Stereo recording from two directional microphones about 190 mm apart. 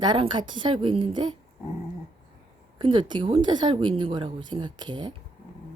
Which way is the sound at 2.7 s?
25° right (ahead or behind).